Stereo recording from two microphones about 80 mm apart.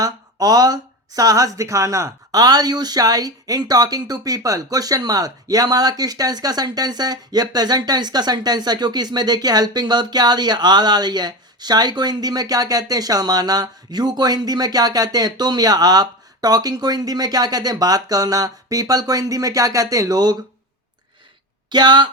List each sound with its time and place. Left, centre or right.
0.0 s speech: right
2.4 s speech: right
21.7 s speech: right